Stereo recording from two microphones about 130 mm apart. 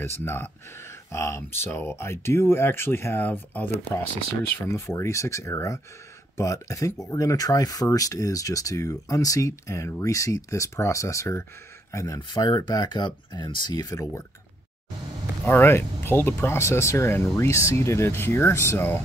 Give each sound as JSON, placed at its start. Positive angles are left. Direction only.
{"t": 0.0, "sound": "speech", "side_deg": 20}
{"t": 4.7, "sound": "speech", "side_deg": 20}
{"t": 15.4, "sound": "speech", "side_deg": 15}